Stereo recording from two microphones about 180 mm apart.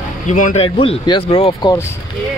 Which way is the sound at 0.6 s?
30° left (ahead or behind).